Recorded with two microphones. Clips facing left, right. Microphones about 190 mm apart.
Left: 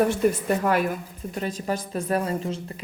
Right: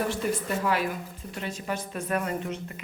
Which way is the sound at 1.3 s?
35° left (ahead or behind).